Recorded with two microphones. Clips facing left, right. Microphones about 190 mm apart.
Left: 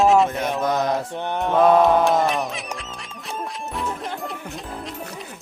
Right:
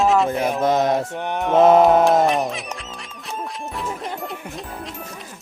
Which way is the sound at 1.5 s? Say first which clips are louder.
Right 3 dB; 20° right (ahead or behind).